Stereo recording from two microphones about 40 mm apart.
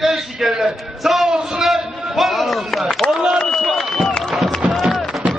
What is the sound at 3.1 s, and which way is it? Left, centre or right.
Speech, centre.